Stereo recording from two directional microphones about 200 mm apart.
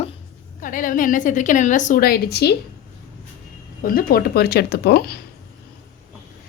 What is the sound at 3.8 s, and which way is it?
Speech, 45° left (ahead or behind).